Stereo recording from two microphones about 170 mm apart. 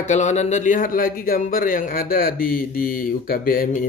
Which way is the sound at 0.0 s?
45° left (ahead or behind).